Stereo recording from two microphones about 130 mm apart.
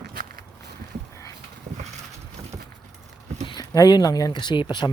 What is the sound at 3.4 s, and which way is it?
Speech, 30° left (ahead or behind).